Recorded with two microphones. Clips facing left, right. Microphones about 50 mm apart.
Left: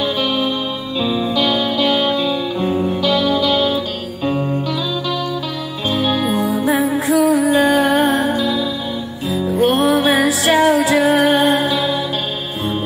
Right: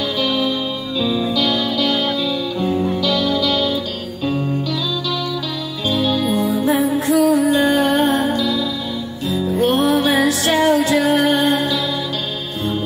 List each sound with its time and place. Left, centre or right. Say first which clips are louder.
0.0 s music: left 1 dB; left
5.9 s music: even; left
7.1 s music: left 1 dB; centre